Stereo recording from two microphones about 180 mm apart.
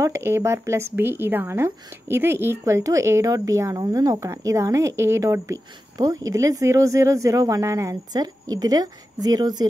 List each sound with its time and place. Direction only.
0.0 s a woman's voice: 15° right (ahead or behind)